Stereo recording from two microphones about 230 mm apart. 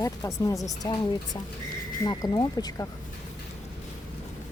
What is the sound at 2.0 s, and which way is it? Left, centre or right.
Speech, centre.